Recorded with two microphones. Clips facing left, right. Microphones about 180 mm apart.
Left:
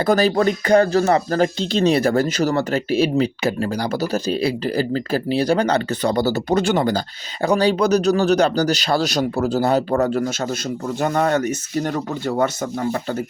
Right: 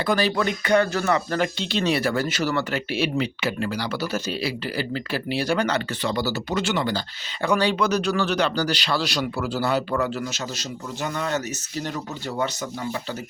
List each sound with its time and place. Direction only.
0.0 s speech: 45° left (ahead or behind)